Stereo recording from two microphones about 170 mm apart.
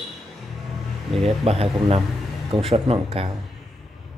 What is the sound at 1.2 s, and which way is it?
Speech, 35° right (ahead or behind).